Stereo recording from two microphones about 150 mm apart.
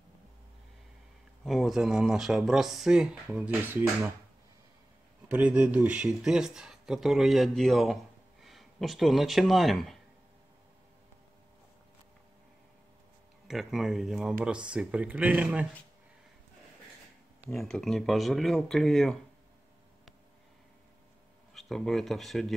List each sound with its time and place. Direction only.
1.4 s speech: centre (ahead or behind)
5.3 s speech: 10° right (ahead or behind)
13.5 s speech: centre (ahead or behind)
17.5 s speech: 5° left (ahead or behind)
21.5 s speech: centre (ahead or behind)